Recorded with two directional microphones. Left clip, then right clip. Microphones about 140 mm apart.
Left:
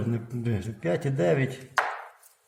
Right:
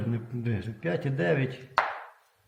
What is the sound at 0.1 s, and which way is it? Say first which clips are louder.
A man's voice: left 2 dB; 25° left (ahead or behind).